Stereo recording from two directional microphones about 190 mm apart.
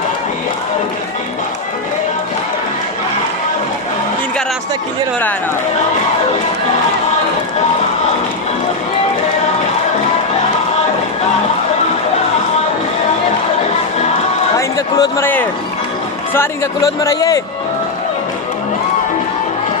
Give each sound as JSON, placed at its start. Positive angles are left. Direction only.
{"t": 14.6, "sound": "a man's voice", "side_deg": 15}